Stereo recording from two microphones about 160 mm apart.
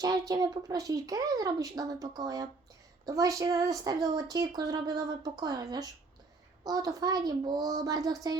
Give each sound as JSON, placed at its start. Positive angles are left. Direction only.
{"t": 0.0, "sound": "a woman's voice", "side_deg": -25}